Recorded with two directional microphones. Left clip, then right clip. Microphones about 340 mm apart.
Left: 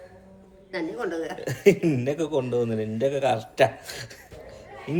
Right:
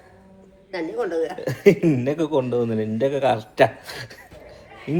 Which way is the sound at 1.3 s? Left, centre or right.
Centre.